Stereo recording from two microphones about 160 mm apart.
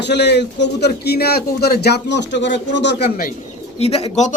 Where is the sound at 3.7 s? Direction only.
40° left (ahead or behind).